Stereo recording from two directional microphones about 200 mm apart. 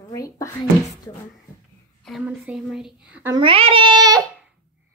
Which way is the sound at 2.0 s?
5° right (ahead or behind).